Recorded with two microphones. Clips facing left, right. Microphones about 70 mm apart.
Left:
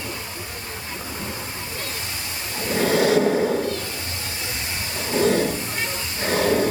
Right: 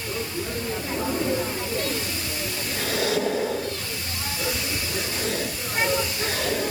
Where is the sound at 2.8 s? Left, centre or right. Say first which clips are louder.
Left 8 dB; left.